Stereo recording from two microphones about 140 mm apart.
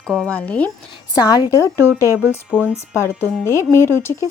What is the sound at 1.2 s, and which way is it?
Speech, 30° left (ahead or behind).